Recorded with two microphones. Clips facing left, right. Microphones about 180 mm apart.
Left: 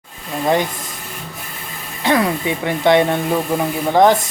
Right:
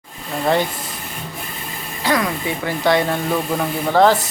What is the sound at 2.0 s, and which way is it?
Speech, 25° left (ahead or behind).